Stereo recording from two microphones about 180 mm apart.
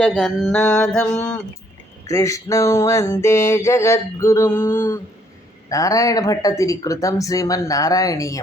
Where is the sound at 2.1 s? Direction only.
15° left (ahead or behind).